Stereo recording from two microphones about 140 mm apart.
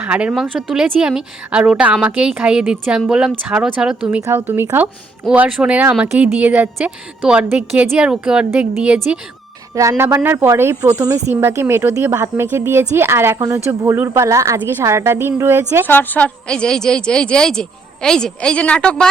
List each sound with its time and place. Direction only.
0.0 s a woman's voice: 10° right (ahead or behind)
10.0 s speech: 20° right (ahead or behind)
15.9 s a woman's voice: 15° left (ahead or behind)